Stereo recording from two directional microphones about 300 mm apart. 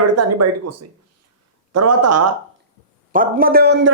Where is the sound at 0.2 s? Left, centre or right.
Right.